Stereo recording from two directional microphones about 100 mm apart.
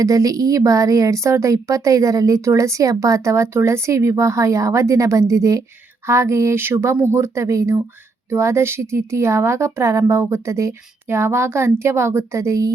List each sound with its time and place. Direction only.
0.0 s a woman's voice: 35° right (ahead or behind)